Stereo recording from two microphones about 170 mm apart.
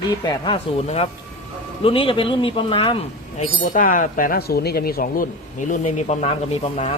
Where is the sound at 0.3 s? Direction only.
30° left (ahead or behind).